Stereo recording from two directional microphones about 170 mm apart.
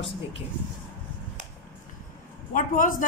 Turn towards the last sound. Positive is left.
turn(degrees=50)  # may be behind; listen again after turning